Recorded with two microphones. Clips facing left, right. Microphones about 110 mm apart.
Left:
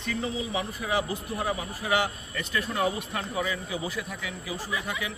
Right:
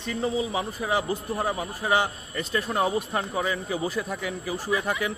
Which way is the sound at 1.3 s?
40° right (ahead or behind).